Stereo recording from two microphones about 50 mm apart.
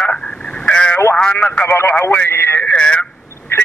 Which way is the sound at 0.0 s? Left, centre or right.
Left.